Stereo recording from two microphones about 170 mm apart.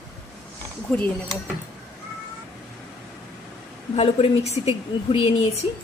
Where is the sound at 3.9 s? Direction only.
35° left (ahead or behind).